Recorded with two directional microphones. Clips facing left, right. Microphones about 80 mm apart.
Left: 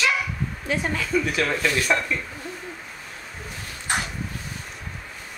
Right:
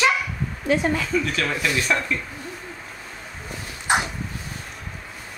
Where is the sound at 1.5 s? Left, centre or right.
Centre.